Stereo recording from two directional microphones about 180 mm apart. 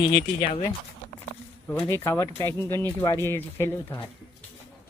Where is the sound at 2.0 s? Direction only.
15° left (ahead or behind).